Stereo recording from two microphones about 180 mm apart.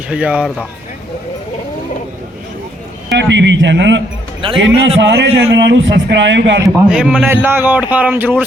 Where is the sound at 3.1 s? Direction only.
75° right (ahead or behind).